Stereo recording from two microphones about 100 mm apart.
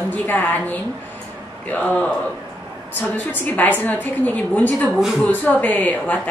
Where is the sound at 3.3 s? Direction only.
15° left (ahead or behind).